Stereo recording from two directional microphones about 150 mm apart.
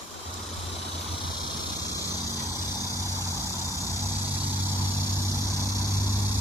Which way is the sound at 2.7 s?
25° left (ahead or behind).